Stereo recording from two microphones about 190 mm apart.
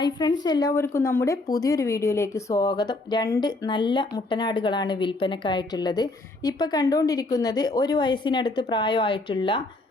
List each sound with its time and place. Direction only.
0.0 s a woman's voice: 20° left (ahead or behind)